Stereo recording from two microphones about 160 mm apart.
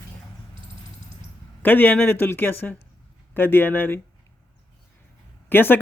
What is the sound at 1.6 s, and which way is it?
Speech, 10° left (ahead or behind).